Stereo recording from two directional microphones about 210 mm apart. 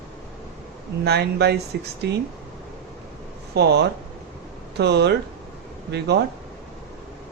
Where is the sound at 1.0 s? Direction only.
50° right (ahead or behind).